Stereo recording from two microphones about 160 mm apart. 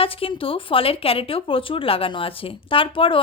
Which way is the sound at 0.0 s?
35° left (ahead or behind).